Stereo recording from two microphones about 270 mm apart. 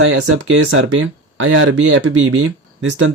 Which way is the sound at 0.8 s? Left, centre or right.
Right.